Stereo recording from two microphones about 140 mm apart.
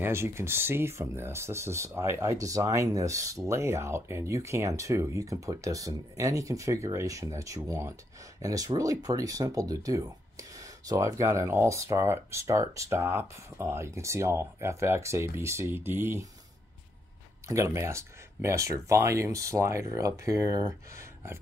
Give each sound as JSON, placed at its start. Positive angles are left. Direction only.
{"t": 0.0, "sound": "speech", "side_deg": -20}
{"t": 17.5, "sound": "speech", "side_deg": -20}